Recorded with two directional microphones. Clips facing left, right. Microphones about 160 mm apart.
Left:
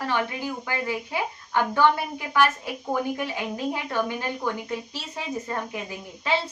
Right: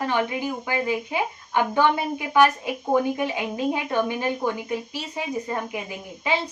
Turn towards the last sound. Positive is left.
turn(degrees=-15)  # may be behind; listen again after turning